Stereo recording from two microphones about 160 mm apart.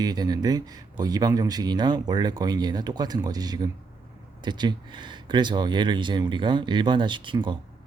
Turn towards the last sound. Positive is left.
turn(degrees=-30)  # may be behind; listen again after turning